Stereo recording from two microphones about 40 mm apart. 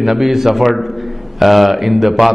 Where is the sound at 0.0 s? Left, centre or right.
Centre.